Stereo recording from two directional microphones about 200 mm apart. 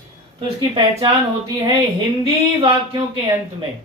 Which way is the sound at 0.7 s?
30° right (ahead or behind).